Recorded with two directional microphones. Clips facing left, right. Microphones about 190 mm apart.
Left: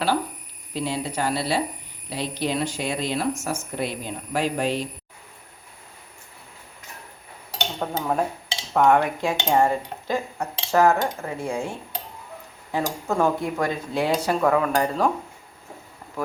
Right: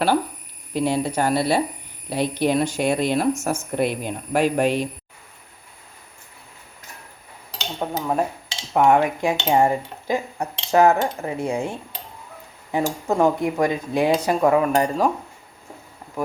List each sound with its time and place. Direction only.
0.7 s speech: 55° right (ahead or behind)
7.8 s speech: 10° right (ahead or behind)
12.7 s speech: 15° right (ahead or behind)